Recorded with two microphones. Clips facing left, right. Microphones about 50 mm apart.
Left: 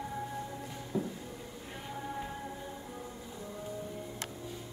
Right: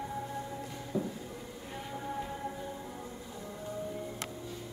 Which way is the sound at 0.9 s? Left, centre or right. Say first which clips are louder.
Even; left.